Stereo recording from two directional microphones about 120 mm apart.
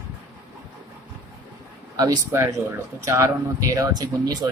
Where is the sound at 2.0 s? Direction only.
25° right (ahead or behind).